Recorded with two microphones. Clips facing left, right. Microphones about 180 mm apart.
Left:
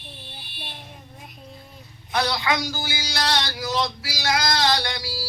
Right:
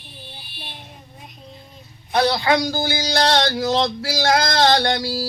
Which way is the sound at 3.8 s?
50° right (ahead or behind).